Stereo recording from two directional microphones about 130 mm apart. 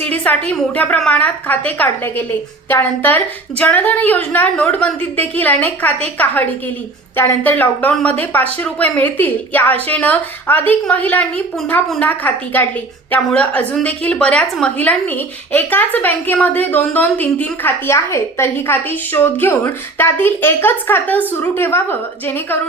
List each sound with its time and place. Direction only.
0.0 s a woman's voice: 10° left (ahead or behind)